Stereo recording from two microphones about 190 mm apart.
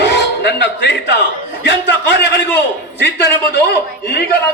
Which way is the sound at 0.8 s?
65° left (ahead or behind).